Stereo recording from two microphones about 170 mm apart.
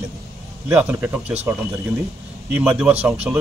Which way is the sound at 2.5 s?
10° right (ahead or behind).